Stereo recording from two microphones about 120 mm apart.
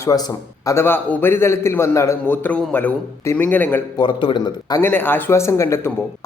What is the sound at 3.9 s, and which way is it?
Speech, 40° left (ahead or behind).